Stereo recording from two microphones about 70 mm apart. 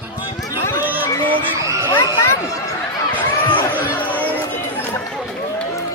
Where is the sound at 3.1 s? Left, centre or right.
Left.